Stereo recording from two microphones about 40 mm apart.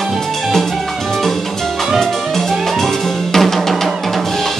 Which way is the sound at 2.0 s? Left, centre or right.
Centre.